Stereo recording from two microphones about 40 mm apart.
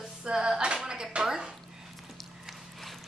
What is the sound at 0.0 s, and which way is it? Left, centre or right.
Music, centre.